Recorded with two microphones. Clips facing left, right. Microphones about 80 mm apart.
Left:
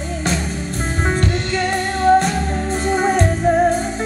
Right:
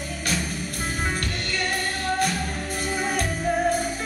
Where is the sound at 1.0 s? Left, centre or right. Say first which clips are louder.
Left 12 dB; left.